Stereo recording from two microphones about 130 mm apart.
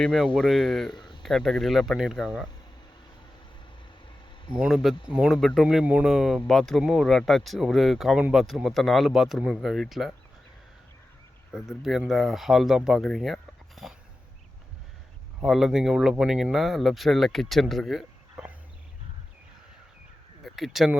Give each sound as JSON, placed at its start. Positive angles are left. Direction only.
{"t": 0.0, "sound": "speech", "side_deg": 0}
{"t": 0.9, "sound": "a sound", "side_deg": 35}
{"t": 1.2, "sound": "speech", "side_deg": 0}
{"t": 4.5, "sound": "speech", "side_deg": -5}
{"t": 5.6, "sound": "speech", "side_deg": -10}
{"t": 11.5, "sound": "speech", "side_deg": -5}
{"t": 15.4, "sound": "speech", "side_deg": -5}
{"t": 20.4, "sound": "speech", "side_deg": 0}